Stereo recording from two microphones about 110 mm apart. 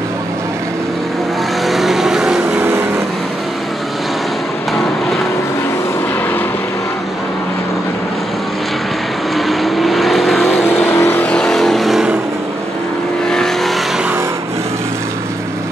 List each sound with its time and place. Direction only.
1.7 s vehicle: centre (ahead or behind)
9.5 s vehicle: centre (ahead or behind)
10.6 s vehicle: 20° left (ahead or behind)
11.2 s vehicle: 5° left (ahead or behind)